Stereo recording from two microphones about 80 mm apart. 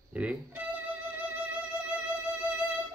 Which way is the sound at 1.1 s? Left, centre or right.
Centre.